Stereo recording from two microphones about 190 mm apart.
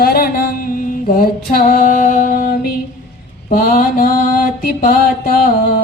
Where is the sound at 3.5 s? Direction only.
50° left (ahead or behind).